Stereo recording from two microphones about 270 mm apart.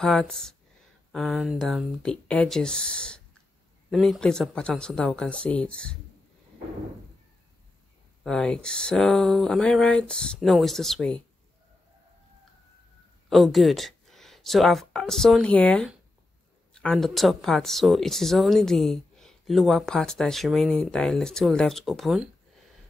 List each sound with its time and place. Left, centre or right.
0.0 s speech: centre
8.2 s speech: centre
13.3 s speech: centre